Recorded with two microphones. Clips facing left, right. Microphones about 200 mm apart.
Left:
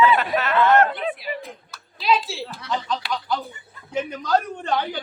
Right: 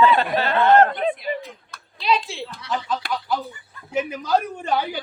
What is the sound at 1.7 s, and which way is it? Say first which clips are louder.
A woman's voice: left 1 dB; centre (ahead or behind).